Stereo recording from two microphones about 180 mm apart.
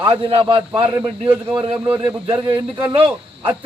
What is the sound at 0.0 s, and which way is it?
A man's voice, 30° right (ahead or behind).